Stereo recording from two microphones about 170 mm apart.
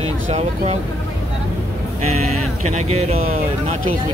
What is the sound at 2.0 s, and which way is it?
Speech, 40° right (ahead or behind).